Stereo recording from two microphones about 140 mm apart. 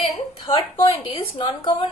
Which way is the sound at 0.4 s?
35° left (ahead or behind).